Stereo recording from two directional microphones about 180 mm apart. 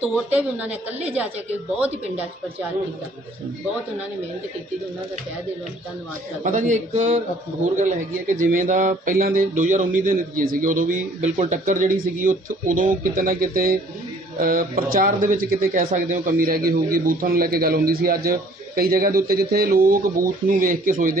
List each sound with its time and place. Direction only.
0.3 s a woman's voice: 10° right (ahead or behind)
6.4 s speech: 45° right (ahead or behind)
8.4 s speech: 45° right (ahead or behind)